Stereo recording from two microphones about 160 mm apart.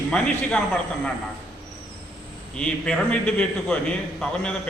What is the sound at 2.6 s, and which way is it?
A man's voice, 5° left (ahead or behind).